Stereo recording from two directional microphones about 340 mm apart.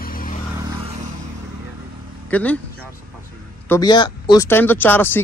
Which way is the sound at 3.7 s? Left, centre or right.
Centre.